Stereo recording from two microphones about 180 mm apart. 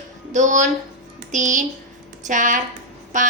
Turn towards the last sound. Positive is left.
turn(degrees=-45)  # may be behind; listen again after turning